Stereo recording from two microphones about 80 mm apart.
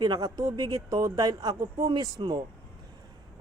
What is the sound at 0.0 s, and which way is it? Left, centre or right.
A woman's voice, right.